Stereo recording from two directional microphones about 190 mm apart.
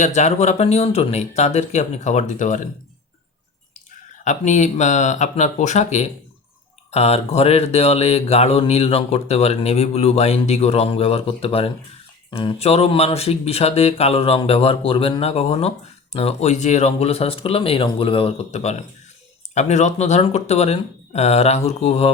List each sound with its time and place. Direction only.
0.0 s mantra: 35° left (ahead or behind)
4.2 s mantra: 40° left (ahead or behind)